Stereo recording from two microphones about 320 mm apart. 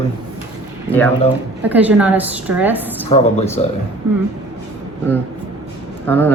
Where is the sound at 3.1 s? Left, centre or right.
Centre.